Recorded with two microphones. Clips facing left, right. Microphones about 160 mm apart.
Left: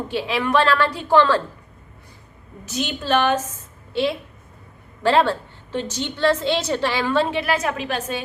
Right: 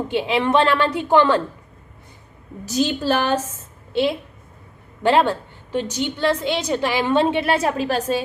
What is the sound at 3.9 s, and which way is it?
A woman's voice, 25° right (ahead or behind).